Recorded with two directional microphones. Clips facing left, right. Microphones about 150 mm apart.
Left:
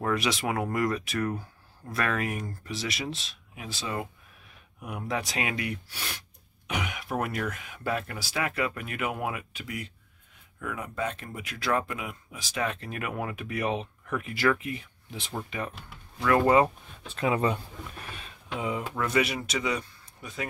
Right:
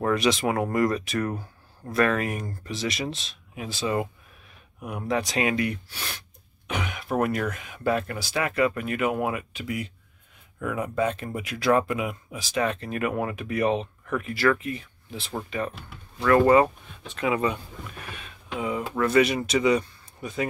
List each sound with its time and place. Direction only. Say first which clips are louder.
0.1 s speech: right 5 dB; 5° left (ahead or behind)
10.6 s speech: right 7 dB; 15° right (ahead or behind)
12.4 s speech: right 5 dB; centre (ahead or behind)
17.1 s speech: right 1 dB; 30° left (ahead or behind)
18.1 s a sound: right 3 dB; 30° left (ahead or behind)
18.9 s speech: right 7 dB; 10° left (ahead or behind)